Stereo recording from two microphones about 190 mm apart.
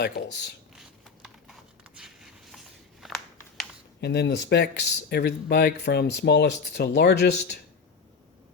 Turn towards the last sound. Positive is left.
turn(degrees=60)  # may be behind; listen again after turning